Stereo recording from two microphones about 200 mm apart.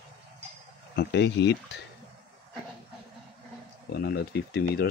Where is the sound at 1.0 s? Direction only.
55° left (ahead or behind).